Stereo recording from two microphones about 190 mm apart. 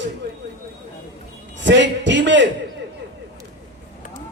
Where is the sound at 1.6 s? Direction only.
70° right (ahead or behind).